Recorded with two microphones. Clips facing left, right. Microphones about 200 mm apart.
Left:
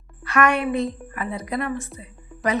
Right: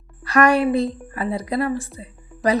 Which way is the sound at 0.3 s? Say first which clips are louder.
Right 4 dB; 35° right (ahead or behind).